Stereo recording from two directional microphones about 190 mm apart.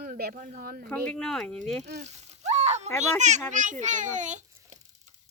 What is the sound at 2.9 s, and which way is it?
A child's voice, 40° right (ahead or behind).